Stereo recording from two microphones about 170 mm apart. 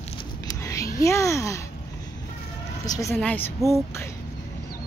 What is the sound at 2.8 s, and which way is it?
Speech, 20° left (ahead or behind).